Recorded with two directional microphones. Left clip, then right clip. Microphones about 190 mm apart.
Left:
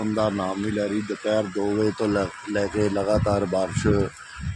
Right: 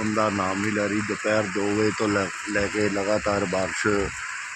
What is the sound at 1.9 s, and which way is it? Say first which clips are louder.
Speech: even; 15° left (ahead or behind).